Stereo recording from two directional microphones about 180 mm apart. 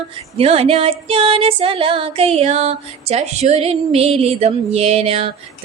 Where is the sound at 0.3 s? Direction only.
35° right (ahead or behind).